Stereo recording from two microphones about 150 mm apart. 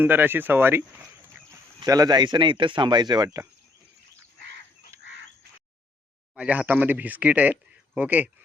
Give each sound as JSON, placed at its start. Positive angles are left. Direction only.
{"t": 0.0, "sound": "speech", "side_deg": -15}
{"t": 1.8, "sound": "speech", "side_deg": -25}
{"t": 4.9, "sound": "duck", "side_deg": -20}
{"t": 6.3, "sound": "speech", "side_deg": -10}